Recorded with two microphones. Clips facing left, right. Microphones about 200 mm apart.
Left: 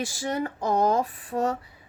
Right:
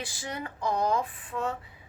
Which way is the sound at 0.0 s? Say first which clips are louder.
Left 8 dB; 45° left (ahead or behind).